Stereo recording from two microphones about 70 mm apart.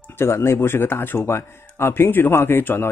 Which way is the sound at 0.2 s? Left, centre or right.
Left.